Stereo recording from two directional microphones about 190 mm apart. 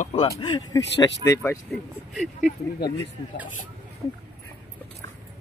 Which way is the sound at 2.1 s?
Centre (ahead or behind).